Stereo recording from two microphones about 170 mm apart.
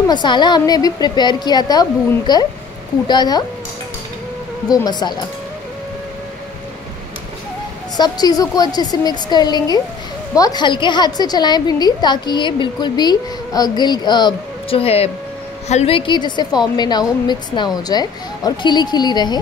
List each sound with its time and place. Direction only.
0.1 s a woman's voice: 25° left (ahead or behind)
4.6 s a woman's voice: 25° left (ahead or behind)
8.0 s a woman's voice: 20° left (ahead or behind)